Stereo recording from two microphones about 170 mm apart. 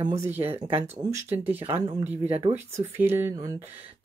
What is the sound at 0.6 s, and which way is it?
Speech, 30° right (ahead or behind).